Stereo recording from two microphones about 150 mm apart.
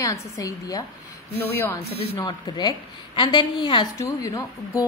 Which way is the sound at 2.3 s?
30° left (ahead or behind).